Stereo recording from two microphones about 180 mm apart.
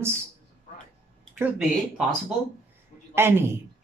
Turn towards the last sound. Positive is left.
turn(degrees=-15)  # may be behind; listen again after turning